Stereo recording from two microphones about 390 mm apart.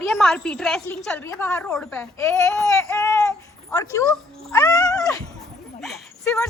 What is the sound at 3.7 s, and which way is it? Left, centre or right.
Cat, centre.